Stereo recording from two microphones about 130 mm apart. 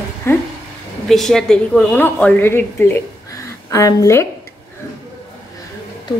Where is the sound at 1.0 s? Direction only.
Centre (ahead or behind); by 4.3 s 25° left (ahead or behind).